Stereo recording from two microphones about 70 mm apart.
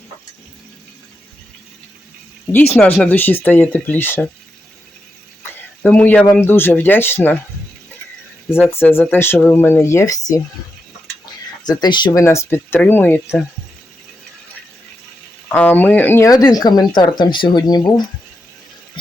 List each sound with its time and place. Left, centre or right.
2.5 s speech: left
5.4 s a sound: left
6.3 s speech: left
8.8 s speech: left
10.1 s speech: left
11.6 s speech: left
12.1 s speech: left
12.9 s speech: left
15.4 s speech: left
16.2 s speech: left